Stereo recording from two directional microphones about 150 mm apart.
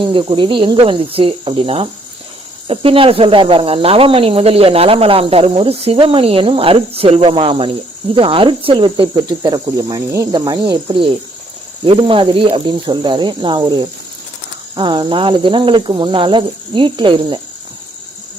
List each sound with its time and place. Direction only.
0.0 s speech: 30° right (ahead or behind)